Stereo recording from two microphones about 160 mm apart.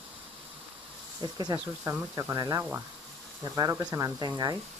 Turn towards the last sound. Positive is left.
turn(degrees=-25)  # may be behind; listen again after turning